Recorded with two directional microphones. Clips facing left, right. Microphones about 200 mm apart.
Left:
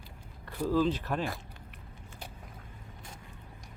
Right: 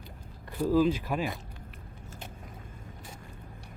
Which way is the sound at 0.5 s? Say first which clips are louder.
Right 3 dB; 10° right (ahead or behind).